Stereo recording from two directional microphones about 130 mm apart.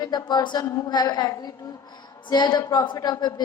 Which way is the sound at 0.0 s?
30° left (ahead or behind).